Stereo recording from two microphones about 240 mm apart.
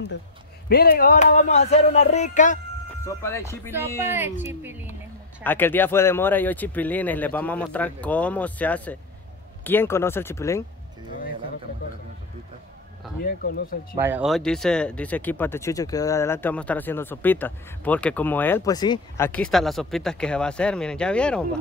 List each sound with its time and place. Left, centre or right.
0.7 s speech: left
3.1 s speech: centre
4.1 s speech: centre
5.4 s speech: centre
13.2 s speech: left
13.9 s speech: centre